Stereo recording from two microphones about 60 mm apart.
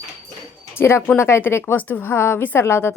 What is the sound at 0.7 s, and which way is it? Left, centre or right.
A woman's voice, left.